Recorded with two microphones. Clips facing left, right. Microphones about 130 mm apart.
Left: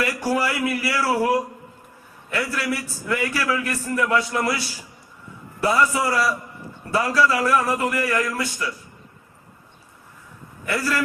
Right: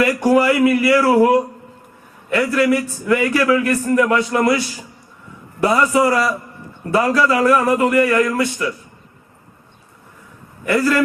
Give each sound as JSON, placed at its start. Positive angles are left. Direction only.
{"t": 0.0, "sound": "a man's voice", "side_deg": -60}
{"t": 5.6, "sound": "a man's voice", "side_deg": -65}
{"t": 10.7, "sound": "a man's voice", "side_deg": -60}